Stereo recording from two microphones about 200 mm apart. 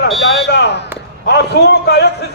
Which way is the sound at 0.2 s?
60° left (ahead or behind).